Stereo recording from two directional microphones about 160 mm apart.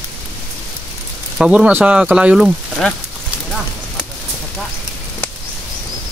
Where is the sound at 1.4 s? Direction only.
5° right (ahead or behind).